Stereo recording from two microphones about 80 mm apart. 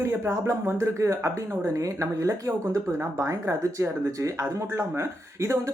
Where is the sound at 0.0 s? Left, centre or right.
Right.